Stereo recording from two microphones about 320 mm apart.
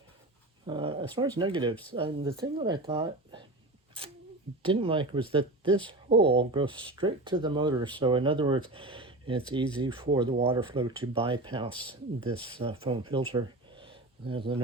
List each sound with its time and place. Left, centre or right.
0.7 s speech: centre
4.6 s speech: centre